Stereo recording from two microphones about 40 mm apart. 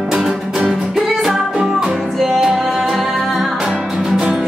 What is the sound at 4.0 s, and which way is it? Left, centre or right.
Music, centre.